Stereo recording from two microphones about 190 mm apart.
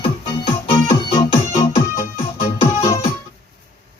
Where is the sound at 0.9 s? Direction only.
20° left (ahead or behind).